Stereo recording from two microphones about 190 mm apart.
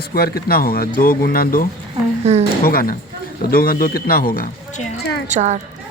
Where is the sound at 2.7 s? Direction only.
50° left (ahead or behind).